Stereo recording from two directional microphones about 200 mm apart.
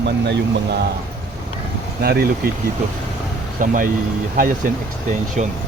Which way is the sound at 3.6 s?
40° right (ahead or behind).